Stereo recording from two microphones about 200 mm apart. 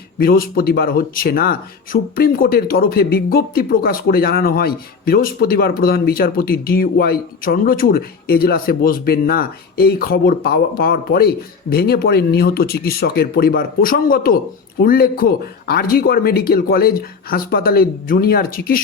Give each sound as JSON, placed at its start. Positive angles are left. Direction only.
{"t": 0.2, "sound": "speech", "side_deg": 45}